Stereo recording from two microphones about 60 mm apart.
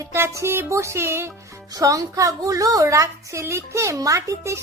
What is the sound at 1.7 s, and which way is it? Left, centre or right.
A woman's voice, right.